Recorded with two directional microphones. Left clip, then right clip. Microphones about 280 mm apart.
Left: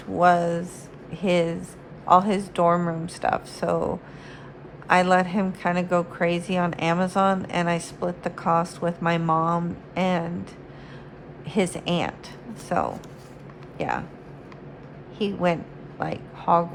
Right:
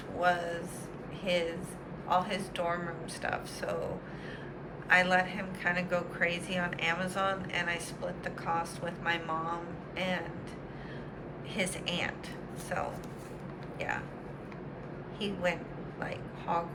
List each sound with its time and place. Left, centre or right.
0.2 s a woman's voice: centre
4.9 s a woman's voice: centre
11.5 s a woman's voice: centre
15.2 s a woman's voice: centre